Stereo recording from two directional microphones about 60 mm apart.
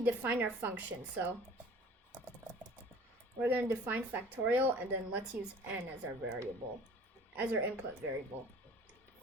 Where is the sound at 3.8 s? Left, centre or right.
Right.